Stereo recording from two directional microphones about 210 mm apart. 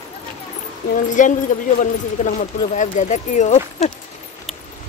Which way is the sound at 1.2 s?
40° left (ahead or behind).